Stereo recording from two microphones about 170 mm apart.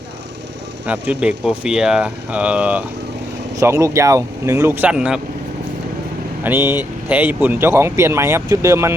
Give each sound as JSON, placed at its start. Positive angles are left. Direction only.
{"t": 0.9, "sound": "speech", "side_deg": -10}
{"t": 6.4, "sound": "speech", "side_deg": -15}